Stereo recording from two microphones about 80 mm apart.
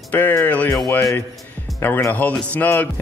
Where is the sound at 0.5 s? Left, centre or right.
Centre.